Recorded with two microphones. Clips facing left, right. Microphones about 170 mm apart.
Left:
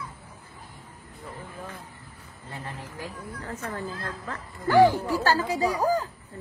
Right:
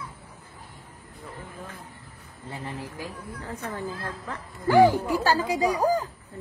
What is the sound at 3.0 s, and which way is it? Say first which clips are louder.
Speech: even; 15° right (ahead or behind).